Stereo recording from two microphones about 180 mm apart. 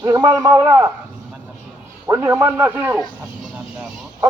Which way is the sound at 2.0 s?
15° right (ahead or behind).